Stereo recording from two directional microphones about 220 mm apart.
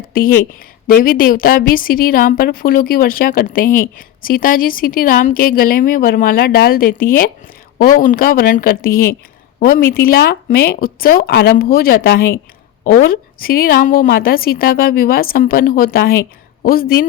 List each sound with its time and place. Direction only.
0.1 s a woman's voice: 40° left (ahead or behind)